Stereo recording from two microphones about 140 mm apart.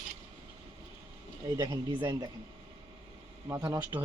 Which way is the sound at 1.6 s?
30° right (ahead or behind).